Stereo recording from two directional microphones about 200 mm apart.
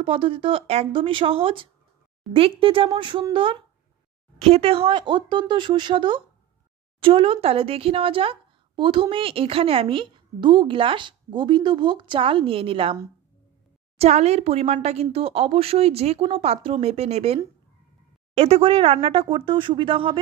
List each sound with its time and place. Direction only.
0.0 s speech: 25° right (ahead or behind)
13.9 s speech: 30° right (ahead or behind)